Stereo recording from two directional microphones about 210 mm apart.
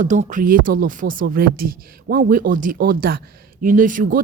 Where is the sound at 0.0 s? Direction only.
35° right (ahead or behind).